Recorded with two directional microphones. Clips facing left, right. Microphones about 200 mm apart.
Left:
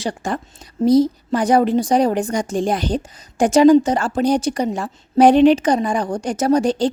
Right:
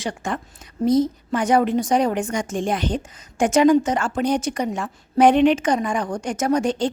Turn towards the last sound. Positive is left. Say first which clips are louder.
# left 4 dB
turn(degrees=35)  # may be behind; listen again after turning